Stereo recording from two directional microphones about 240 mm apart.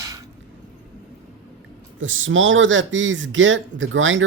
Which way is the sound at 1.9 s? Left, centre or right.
Right.